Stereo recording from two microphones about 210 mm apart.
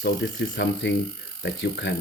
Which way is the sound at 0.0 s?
60° left (ahead or behind).